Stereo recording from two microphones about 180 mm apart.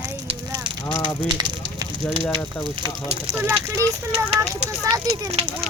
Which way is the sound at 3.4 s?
10° right (ahead or behind).